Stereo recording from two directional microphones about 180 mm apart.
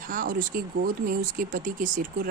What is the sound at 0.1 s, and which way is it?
Speech, 50° right (ahead or behind).